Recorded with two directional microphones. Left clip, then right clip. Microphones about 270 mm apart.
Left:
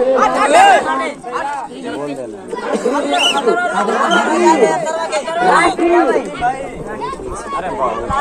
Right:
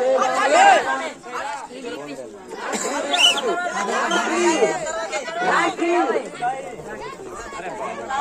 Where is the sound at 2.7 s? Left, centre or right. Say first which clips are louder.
Left 7 dB; centre.